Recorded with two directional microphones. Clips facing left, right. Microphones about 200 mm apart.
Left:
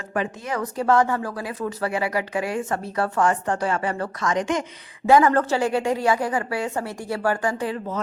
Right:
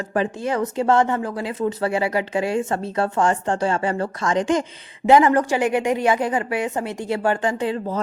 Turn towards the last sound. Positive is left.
turn(degrees=-25)  # may be behind; listen again after turning